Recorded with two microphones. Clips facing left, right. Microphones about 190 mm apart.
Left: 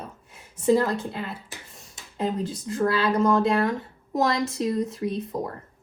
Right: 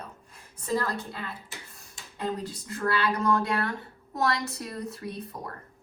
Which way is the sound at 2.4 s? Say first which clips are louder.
Left 6 dB; 25° left (ahead or behind).